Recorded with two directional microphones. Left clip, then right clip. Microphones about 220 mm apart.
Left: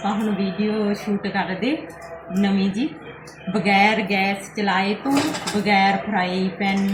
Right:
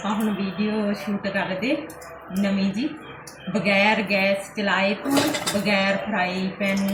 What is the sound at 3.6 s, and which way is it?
A woman's voice, centre (ahead or behind).